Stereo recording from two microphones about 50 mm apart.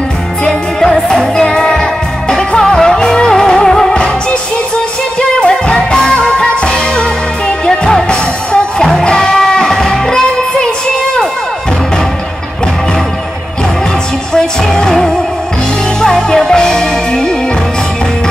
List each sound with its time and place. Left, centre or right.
0.5 s music: centre
5.4 s music: centre
14.3 s music: centre